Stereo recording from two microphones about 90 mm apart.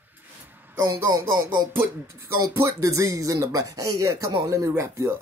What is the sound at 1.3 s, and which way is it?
Music, 55° right (ahead or behind).